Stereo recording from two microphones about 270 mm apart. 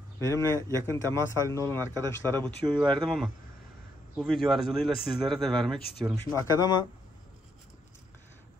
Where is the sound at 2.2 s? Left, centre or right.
Centre.